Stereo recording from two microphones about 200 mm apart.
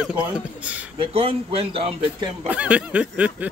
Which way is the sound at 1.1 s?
30° right (ahead or behind).